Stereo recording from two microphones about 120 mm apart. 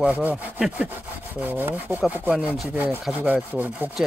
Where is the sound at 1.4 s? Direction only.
15° right (ahead or behind).